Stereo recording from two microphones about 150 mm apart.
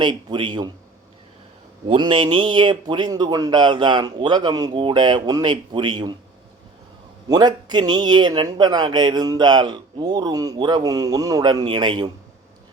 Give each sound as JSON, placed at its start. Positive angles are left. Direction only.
{"t": 0.0, "sound": "a man's voice", "side_deg": -30}
{"t": 2.0, "sound": "speech", "side_deg": -30}
{"t": 7.3, "sound": "speech", "side_deg": -25}